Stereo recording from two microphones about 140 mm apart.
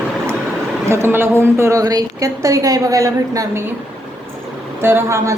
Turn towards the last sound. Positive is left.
turn(degrees=-20)  # may be behind; listen again after turning